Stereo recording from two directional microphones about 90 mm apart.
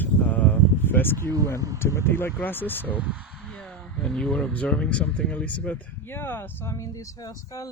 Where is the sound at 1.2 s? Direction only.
40° right (ahead or behind).